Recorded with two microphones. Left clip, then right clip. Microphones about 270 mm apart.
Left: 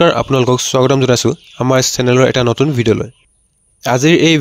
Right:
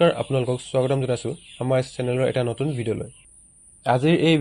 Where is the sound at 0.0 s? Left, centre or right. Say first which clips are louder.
Left 9 dB; left.